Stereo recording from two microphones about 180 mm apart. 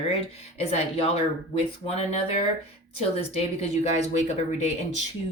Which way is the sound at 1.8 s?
35° left (ahead or behind).